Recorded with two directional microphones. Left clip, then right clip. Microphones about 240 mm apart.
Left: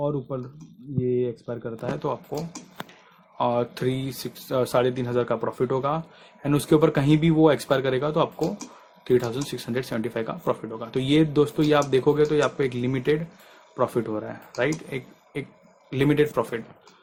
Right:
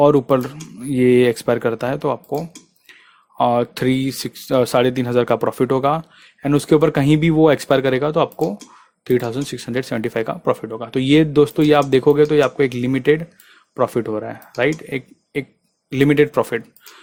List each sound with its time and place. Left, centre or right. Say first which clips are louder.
0.0 s speech: right 15 dB; right